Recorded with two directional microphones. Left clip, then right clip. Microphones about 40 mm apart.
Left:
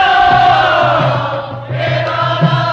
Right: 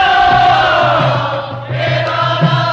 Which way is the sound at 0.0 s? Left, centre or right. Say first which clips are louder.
Even; right.